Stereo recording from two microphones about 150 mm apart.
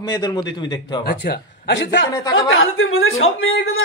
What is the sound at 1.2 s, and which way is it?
Speech, 90° left.